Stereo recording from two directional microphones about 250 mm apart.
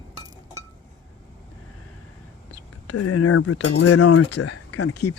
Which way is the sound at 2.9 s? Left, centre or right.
Left.